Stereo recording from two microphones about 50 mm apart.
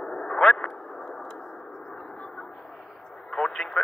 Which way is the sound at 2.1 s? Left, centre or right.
Centre.